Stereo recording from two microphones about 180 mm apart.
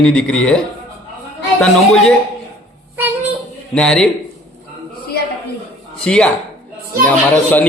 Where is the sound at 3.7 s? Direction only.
5° left (ahead or behind).